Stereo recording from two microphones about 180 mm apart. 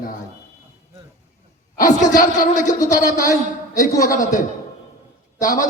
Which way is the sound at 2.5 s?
45° left (ahead or behind).